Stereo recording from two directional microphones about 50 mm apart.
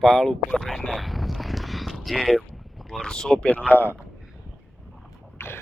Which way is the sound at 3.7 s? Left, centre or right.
Left.